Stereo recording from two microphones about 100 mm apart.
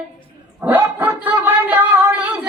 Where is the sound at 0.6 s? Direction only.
20° right (ahead or behind).